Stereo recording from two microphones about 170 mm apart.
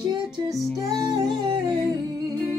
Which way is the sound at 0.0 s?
25° right (ahead or behind).